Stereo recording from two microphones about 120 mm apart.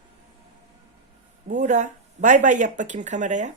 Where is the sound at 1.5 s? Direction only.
90° right.